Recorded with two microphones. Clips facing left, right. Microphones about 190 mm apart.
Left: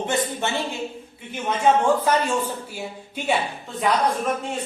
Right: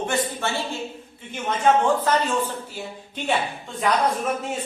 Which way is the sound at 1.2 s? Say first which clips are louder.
Left 1 dB; 10° left (ahead or behind).